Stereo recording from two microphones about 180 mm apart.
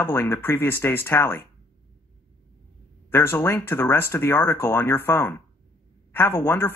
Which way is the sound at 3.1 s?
10° left (ahead or behind).